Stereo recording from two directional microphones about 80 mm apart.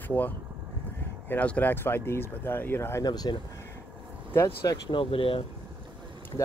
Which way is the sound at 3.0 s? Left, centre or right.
Left.